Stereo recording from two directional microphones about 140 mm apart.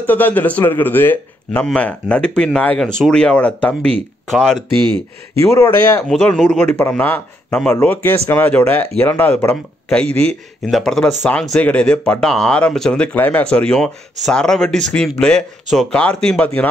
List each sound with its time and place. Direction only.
0.0 s a man's voice: 10° left (ahead or behind)
4.7 s speech: 35° right (ahead or behind)
5.4 s a man's voice: 20° left (ahead or behind)
6.0 s a man's voice: 5° left (ahead or behind)